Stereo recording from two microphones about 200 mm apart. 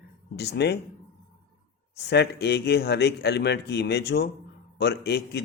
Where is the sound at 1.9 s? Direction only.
55° left (ahead or behind).